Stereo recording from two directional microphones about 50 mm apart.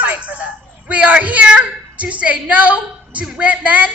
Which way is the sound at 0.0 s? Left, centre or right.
Right.